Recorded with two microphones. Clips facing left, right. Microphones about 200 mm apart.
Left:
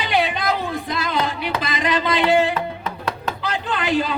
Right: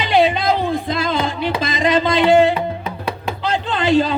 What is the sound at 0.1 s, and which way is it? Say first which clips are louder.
Music: right 6 dB; 25° right (ahead or behind).